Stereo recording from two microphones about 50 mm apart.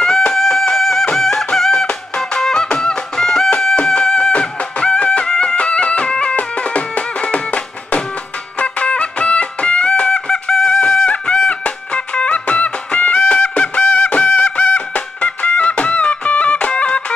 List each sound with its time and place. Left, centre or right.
0.0 s music: centre